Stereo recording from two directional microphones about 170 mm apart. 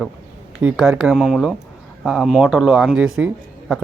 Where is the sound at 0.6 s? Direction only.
5° right (ahead or behind).